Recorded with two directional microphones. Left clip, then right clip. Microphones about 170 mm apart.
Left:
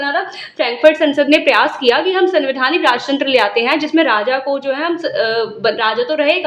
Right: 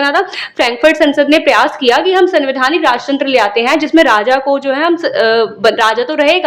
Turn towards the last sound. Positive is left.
turn(degrees=-35)  # may be behind; listen again after turning